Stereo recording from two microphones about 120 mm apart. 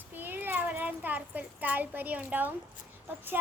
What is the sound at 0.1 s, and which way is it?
A child's voice, 15° right (ahead or behind).